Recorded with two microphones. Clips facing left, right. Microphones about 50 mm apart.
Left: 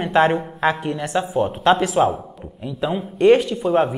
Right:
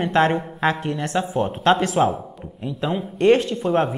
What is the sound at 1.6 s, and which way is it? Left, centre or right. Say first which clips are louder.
Speech: left 1 dB; centre.